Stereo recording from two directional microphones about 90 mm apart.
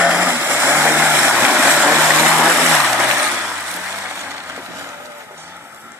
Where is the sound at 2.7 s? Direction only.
5° left (ahead or behind).